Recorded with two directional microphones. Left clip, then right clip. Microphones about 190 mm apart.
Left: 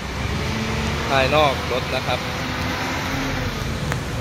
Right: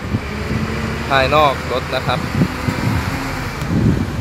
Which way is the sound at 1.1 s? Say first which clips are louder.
Right 4 dB; centre (ahead or behind).